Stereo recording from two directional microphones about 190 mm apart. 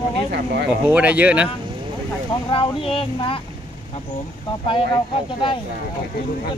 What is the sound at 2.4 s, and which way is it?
Speech, 30° left (ahead or behind).